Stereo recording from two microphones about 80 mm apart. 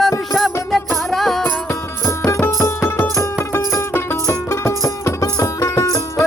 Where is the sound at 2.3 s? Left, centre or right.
Left.